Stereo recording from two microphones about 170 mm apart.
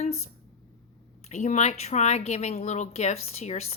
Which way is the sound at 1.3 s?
40° left (ahead or behind).